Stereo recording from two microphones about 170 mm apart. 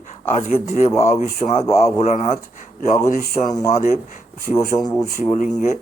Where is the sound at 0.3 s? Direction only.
40° left (ahead or behind).